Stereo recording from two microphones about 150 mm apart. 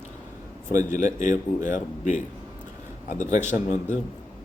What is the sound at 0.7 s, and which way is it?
A man's voice, 55° left (ahead or behind).